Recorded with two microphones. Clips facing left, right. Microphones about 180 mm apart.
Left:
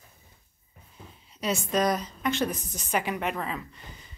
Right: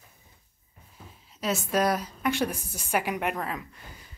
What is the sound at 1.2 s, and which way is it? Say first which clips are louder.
A woman's voice: even; centre (ahead or behind).